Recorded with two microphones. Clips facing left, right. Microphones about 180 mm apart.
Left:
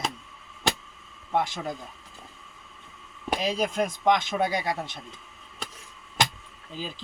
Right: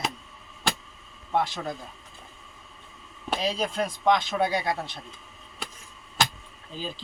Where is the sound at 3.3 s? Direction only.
10° left (ahead or behind).